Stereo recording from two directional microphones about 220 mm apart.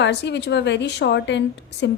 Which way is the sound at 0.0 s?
50° left (ahead or behind).